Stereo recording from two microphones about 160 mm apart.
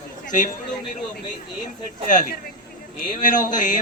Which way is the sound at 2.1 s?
55° left (ahead or behind).